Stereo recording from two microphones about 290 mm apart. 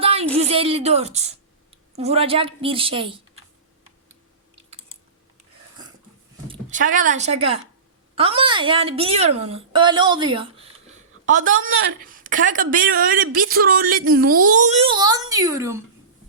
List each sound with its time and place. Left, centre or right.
0.0 s a sound: right
0.3 s a woman's voice: right
6.5 s a woman's voice: right; by 15.8 s centre